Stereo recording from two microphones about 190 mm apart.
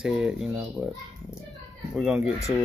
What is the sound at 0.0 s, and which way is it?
Speech, 5° right (ahead or behind).